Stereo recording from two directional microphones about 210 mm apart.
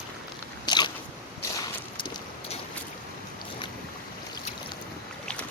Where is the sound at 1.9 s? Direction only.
25° left (ahead or behind).